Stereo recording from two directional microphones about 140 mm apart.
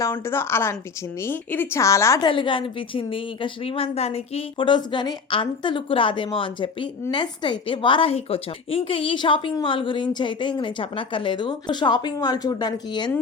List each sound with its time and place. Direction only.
0.0 s a woman's voice: 20° left (ahead or behind)
2.2 s speech: 35° left (ahead or behind)